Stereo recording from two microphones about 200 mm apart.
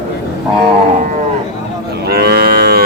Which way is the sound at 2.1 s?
50° right (ahead or behind).